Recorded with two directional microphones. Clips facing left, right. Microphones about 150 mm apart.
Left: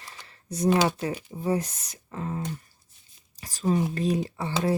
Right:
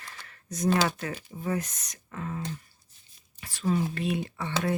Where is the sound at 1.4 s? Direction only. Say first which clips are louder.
Left 4 dB; 30° left (ahead or behind).